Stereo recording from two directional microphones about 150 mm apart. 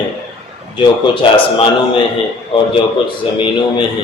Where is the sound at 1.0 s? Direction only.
35° left (ahead or behind).